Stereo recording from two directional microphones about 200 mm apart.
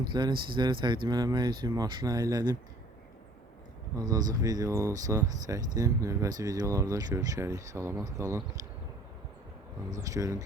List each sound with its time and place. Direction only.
0.1 s speech: 20° right (ahead or behind)
3.9 s speech: 20° right (ahead or behind)
9.9 s speech: 15° right (ahead or behind)